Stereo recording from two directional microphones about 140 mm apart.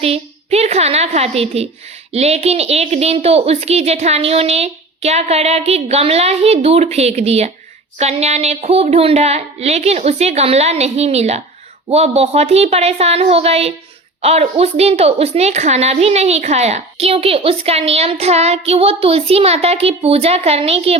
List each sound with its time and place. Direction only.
0.0 s a child's voice: 50° right (ahead or behind)